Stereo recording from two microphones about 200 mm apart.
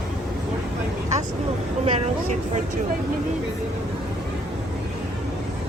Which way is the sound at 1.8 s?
30° right (ahead or behind).